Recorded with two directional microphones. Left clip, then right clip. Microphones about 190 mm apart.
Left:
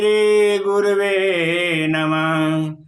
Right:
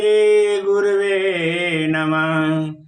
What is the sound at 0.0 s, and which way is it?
Mantra, 25° left (ahead or behind).